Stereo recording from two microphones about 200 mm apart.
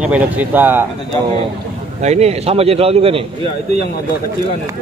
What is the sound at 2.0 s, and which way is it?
A man's voice, 30° right (ahead or behind).